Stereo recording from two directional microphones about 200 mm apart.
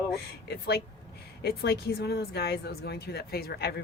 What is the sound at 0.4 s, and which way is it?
Speech, 55° left (ahead or behind).